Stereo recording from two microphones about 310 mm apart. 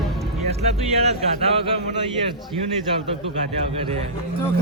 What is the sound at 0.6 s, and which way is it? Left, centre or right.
Speech, centre.